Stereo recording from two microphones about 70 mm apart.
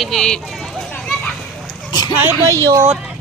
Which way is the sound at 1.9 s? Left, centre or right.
Left.